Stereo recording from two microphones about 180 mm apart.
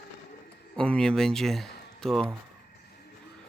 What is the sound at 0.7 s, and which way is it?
Speech, 5° left (ahead or behind).